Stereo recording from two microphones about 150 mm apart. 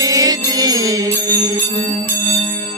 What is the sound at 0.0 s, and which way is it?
Music, 25° right (ahead or behind).